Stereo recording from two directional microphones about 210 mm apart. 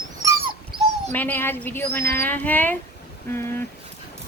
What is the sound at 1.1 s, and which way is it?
A woman's voice, 10° left (ahead or behind).